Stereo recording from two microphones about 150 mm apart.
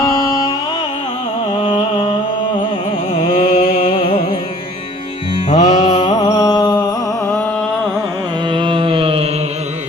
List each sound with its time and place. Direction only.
0.0 s music: 20° left (ahead or behind)
1.5 s a sound: 35° left (ahead or behind)
3.2 s music: 55° left (ahead or behind)
5.5 s mantra: 45° left (ahead or behind)
6.2 s music: 25° left (ahead or behind)
8.5 s a sound: 35° right (ahead or behind)